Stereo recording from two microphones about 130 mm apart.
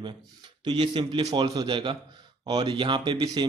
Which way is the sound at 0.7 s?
35° right (ahead or behind).